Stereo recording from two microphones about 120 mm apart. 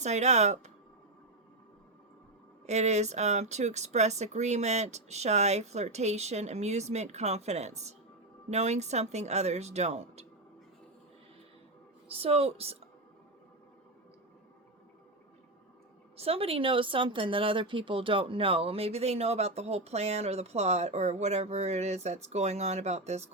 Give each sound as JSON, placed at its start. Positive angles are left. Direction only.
{"t": 0.0, "sound": "speech", "side_deg": -70}
{"t": 2.6, "sound": "speech", "side_deg": -70}
{"t": 12.0, "sound": "speech", "side_deg": -55}
{"t": 16.1, "sound": "speech", "side_deg": -55}